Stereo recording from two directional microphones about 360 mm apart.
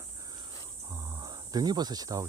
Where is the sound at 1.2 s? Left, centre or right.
Centre.